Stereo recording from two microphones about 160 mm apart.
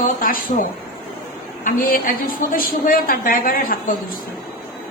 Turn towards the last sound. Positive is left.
turn(degrees=60)  # may be behind; listen again after turning